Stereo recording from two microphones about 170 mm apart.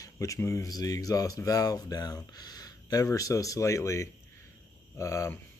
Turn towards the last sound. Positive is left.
turn(degrees=15)  # may be behind; listen again after turning